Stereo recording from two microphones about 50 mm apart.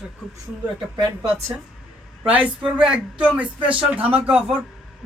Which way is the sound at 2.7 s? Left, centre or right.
Right.